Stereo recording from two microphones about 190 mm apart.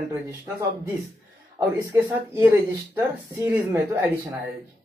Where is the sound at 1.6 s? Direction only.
15° right (ahead or behind).